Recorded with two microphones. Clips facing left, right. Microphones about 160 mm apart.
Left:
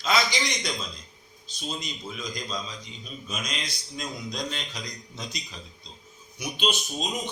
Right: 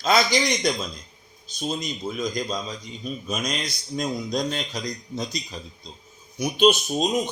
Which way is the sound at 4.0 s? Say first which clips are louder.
Right 8 dB; 45° right (ahead or behind).